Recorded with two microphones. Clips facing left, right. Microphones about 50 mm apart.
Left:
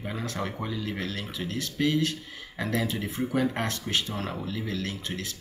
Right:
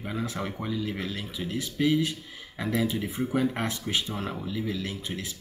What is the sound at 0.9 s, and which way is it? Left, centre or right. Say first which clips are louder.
Speech: even; centre.